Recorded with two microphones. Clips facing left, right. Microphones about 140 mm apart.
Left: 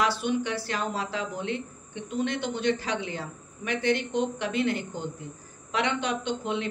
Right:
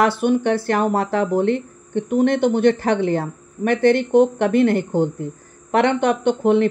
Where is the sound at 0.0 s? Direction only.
55° right (ahead or behind).